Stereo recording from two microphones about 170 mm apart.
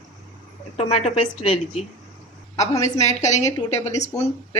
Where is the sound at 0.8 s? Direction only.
40° left (ahead or behind).